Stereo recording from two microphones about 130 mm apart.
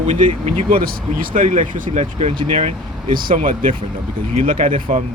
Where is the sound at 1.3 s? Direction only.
75° right (ahead or behind); by 3.7 s 90° right.